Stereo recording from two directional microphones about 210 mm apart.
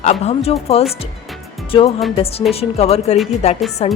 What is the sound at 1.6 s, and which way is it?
A woman's voice, 25° left (ahead or behind).